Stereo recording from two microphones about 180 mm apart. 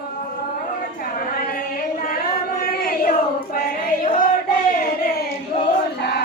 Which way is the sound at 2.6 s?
55° left (ahead or behind).